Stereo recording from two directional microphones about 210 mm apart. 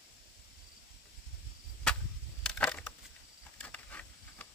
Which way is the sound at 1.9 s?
5° left (ahead or behind).